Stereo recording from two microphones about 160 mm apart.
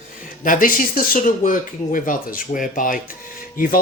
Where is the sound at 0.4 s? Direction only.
60° left (ahead or behind).